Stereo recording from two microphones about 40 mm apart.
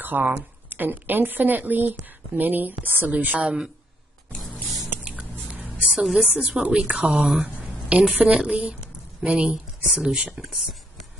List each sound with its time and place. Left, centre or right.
0.0 s speech: right
5.6 s a sound: right
6.2 s a woman's voice: right
7.9 s speech: right
10.0 s speech: right